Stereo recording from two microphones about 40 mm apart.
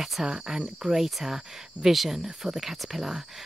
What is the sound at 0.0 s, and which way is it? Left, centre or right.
Cricket, centre.